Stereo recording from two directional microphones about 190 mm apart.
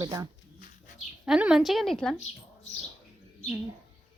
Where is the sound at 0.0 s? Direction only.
15° right (ahead or behind).